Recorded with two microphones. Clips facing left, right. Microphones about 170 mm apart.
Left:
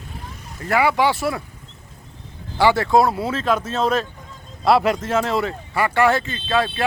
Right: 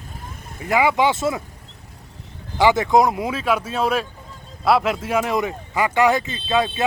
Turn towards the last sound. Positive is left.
turn(degrees=-20)  # may be behind; listen again after turning